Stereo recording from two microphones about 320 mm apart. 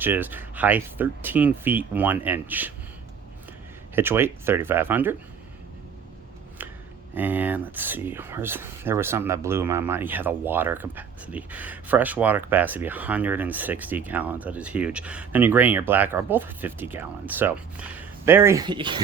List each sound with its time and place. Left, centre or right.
0.0 s speech: centre
3.9 s speech: centre
7.1 s speech: centre